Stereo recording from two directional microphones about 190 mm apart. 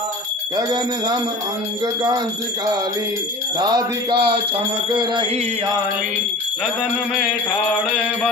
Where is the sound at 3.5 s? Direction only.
20° right (ahead or behind).